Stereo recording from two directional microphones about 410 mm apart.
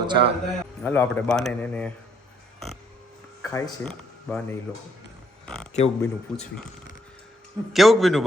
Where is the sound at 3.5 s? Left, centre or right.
Centre.